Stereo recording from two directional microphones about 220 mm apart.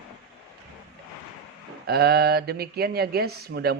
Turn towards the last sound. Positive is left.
turn(degrees=-45)  # may be behind; listen again after turning